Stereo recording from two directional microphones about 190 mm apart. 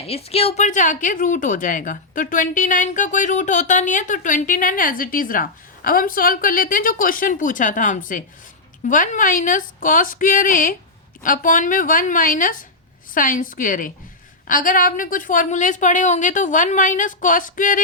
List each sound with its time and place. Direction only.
0.1 s speech: 30° left (ahead or behind)